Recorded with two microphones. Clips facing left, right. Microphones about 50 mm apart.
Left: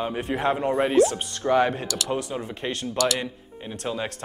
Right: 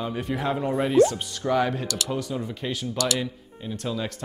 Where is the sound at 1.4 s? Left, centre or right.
Centre.